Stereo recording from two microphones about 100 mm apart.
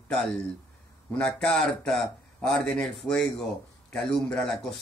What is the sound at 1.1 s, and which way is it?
Speech, 10° left (ahead or behind).